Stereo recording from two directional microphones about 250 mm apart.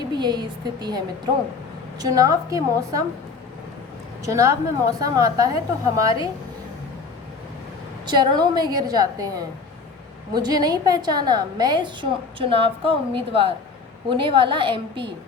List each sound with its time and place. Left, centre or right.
0.1 s a woman's voice: centre
4.3 s a woman's voice: centre
8.0 s a woman's voice: centre